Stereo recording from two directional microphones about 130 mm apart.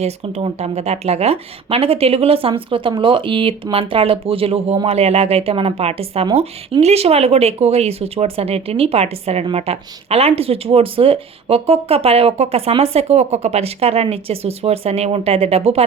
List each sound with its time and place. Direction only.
0.0 s speech: 55° right (ahead or behind)